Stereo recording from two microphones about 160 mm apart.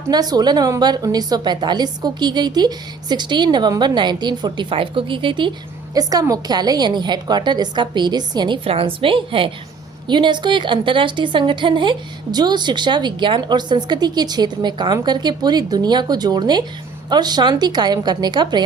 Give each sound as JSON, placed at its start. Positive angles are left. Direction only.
{"t": 0.1, "sound": "a woman's voice", "side_deg": -25}